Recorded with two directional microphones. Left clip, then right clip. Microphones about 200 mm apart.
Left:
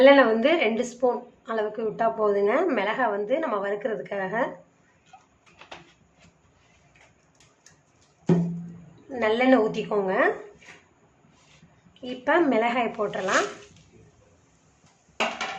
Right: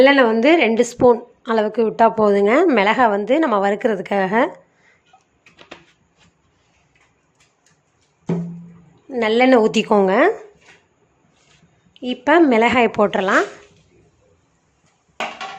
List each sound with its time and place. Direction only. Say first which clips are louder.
0.0 s a woman's voice: right 4 dB; 40° right (ahead or behind)
9.1 s a woman's voice: right 7 dB; 45° right (ahead or behind)
12.0 s a woman's voice: right 8 dB; 45° right (ahead or behind)